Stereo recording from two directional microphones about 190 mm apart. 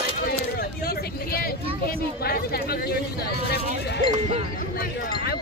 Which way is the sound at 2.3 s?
55° left (ahead or behind).